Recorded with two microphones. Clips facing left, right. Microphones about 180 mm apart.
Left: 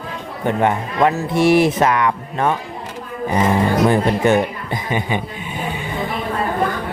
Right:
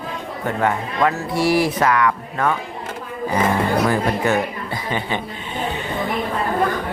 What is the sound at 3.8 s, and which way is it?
Speech, 25° left (ahead or behind).